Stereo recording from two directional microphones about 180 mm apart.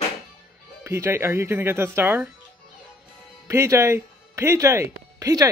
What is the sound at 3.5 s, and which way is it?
Speech, 15° right (ahead or behind).